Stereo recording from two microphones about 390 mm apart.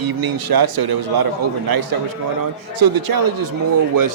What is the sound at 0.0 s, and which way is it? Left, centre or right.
A man's voice, right.